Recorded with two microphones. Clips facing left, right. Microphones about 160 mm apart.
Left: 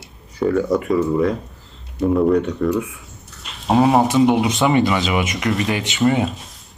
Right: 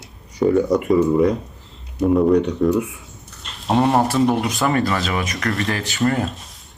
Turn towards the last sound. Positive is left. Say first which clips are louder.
# left 3 dB
turn(degrees=0)  # may be behind; listen again after turning